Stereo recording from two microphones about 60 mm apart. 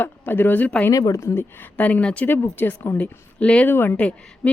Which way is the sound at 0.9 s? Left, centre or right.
Left.